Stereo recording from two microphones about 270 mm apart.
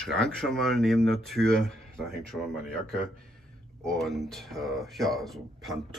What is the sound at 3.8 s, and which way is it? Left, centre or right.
Speech, centre.